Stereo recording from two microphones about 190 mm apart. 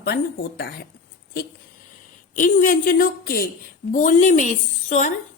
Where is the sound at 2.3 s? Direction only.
45° left (ahead or behind).